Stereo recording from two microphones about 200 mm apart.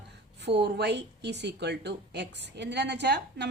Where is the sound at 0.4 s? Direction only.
55° right (ahead or behind).